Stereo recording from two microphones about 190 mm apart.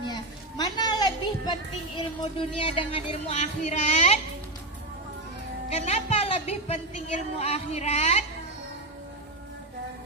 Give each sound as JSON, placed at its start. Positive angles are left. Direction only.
{"t": 0.1, "sound": "children playing", "side_deg": 20}
{"t": 2.0, "sound": "a woman's voice", "side_deg": 25}
{"t": 5.7, "sound": "a woman's voice", "side_deg": 35}